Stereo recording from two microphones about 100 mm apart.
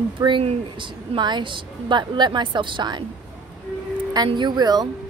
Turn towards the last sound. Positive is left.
turn(degrees=-45)  # may be behind; listen again after turning